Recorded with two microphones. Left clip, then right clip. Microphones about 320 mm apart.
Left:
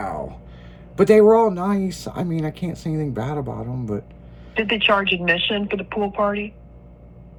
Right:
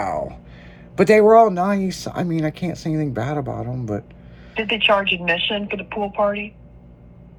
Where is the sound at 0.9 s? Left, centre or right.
Centre.